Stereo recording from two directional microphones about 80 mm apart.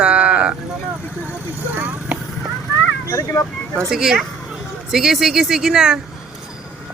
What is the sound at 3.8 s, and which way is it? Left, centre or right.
Speech, centre.